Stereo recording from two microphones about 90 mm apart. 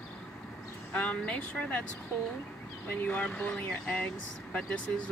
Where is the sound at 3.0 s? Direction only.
15° left (ahead or behind).